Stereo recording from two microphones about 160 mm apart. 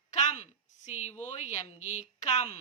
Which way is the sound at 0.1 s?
50° left (ahead or behind).